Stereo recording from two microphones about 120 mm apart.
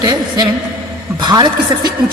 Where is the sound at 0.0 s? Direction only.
40° right (ahead or behind).